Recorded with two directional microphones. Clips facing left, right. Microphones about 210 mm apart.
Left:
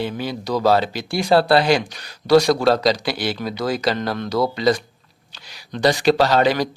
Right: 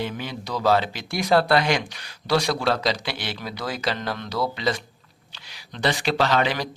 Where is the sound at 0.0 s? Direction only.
35° left (ahead or behind).